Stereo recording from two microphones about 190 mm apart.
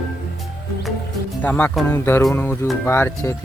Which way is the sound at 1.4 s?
10° left (ahead or behind).